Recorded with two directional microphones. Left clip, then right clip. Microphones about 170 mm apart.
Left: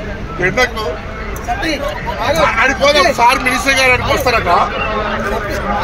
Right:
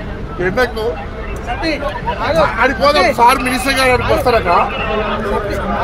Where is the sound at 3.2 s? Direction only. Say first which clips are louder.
Even; 85° right.